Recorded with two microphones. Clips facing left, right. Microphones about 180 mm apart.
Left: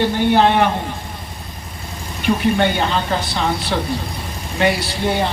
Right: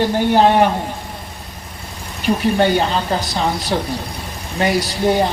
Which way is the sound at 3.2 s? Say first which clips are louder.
Right 1 dB; 40° right (ahead or behind).